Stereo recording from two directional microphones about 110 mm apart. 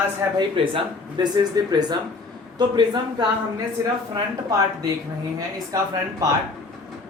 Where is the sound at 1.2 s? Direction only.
40° right (ahead or behind).